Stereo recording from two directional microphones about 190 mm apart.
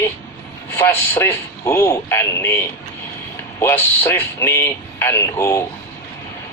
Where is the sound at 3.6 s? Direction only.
10° left (ahead or behind).